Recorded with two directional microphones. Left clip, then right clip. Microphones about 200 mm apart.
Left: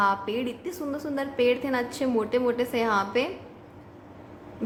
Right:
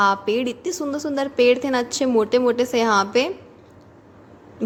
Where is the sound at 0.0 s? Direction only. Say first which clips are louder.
Right 6 dB; 40° right (ahead or behind).